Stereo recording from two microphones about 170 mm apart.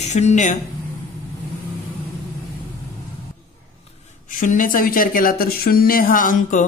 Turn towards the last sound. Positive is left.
turn(degrees=50)  # may be behind; listen again after turning